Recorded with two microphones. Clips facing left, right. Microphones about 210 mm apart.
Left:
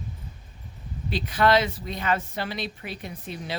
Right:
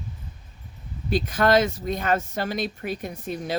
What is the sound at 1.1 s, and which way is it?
Speech, 45° right (ahead or behind).